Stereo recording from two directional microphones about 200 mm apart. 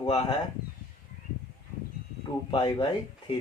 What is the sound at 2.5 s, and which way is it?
Speech, 25° left (ahead or behind).